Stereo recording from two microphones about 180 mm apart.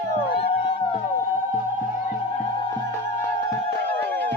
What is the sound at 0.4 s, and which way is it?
Music, 35° left (ahead or behind).